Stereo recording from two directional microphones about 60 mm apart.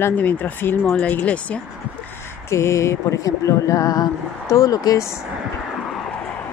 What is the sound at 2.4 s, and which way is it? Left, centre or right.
Speech, left.